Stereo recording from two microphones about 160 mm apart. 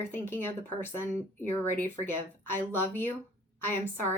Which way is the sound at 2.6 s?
10° left (ahead or behind).